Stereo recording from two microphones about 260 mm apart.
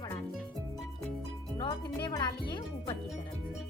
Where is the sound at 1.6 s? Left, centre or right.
Centre.